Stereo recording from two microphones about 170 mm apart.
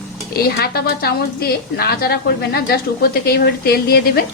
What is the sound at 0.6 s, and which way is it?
A woman's voice, 65° left (ahead or behind).